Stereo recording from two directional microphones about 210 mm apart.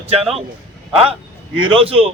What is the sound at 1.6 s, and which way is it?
Speech, 25° right (ahead or behind).